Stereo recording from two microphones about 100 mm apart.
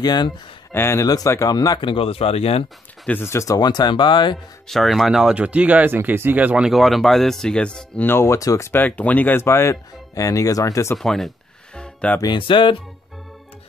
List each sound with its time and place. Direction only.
0.0 s speech: 45° left (ahead or behind)
0.7 s speech: 25° left (ahead or behind)
1.0 s speech: 40° left (ahead or behind)
1.8 s speech: 60° left (ahead or behind); by 2.6 s 80° left
3.1 s speech: 25° left (ahead or behind); by 4.4 s 50° left (ahead or behind)
4.6 s speech: centre (ahead or behind)
8.1 s speech: 25° left (ahead or behind)
8.8 s speech: 15° left (ahead or behind); by 11.0 s 30° left (ahead or behind)
11.0 s music: centre (ahead or behind)
12.2 s speech: 50° left (ahead or behind)